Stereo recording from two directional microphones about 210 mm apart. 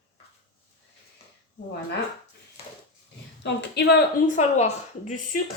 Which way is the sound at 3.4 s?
50° left (ahead or behind).